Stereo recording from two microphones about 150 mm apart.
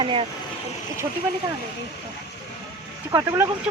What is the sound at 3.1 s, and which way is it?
Speech, 20° right (ahead or behind).